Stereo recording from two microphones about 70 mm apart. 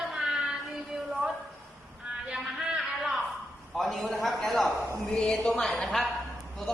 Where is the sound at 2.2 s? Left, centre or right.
Centre.